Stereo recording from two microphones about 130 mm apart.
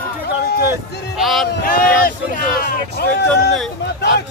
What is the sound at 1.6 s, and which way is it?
Speech, 90° left.